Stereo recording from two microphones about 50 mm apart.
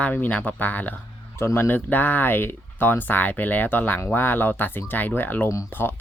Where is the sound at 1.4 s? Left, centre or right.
Left.